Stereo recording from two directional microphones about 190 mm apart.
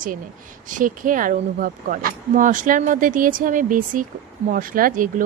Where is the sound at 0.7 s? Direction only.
45° right (ahead or behind).